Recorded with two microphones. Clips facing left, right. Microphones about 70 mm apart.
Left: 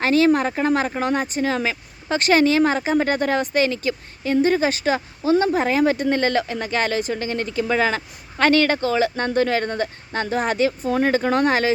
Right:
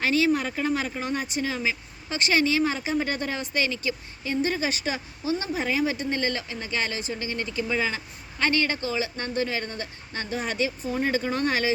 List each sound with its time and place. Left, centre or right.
0.0 s speech: left